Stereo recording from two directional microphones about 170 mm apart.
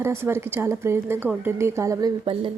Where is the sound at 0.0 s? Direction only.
15° right (ahead or behind).